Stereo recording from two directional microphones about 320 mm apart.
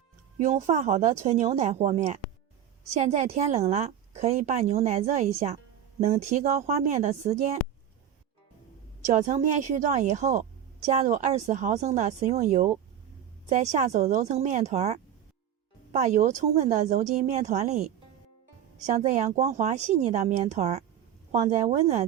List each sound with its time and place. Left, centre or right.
0.3 s a woman's voice: right
9.0 s a woman's voice: right
18.9 s a woman's voice: right